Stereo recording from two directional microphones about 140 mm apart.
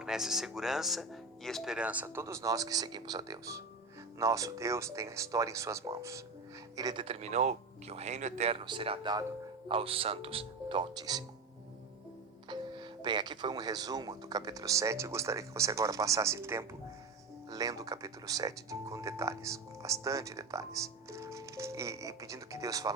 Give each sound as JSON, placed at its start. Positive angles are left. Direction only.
{"t": 0.0, "sound": "speech", "side_deg": -5}
{"t": 7.0, "sound": "speech", "side_deg": -45}
{"t": 8.5, "sound": "speech", "side_deg": -35}
{"t": 12.5, "sound": "speech", "side_deg": -30}